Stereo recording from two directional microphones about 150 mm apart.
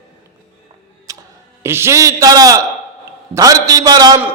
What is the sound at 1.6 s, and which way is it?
A man's voice, 15° right (ahead or behind).